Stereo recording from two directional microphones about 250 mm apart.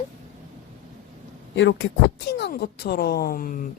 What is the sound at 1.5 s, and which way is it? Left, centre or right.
A woman's voice, left.